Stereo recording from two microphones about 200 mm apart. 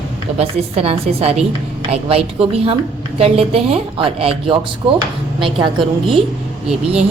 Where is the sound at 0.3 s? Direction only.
30° right (ahead or behind).